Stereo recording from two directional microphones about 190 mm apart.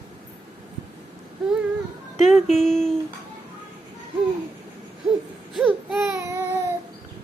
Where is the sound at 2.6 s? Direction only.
Centre (ahead or behind).